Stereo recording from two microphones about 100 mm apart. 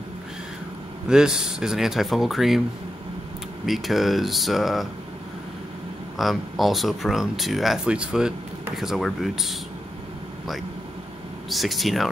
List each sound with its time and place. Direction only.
1.0 s speech: 5° right (ahead or behind)
3.6 s speech: centre (ahead or behind)
6.1 s speech: centre (ahead or behind)
11.4 s speech: centre (ahead or behind)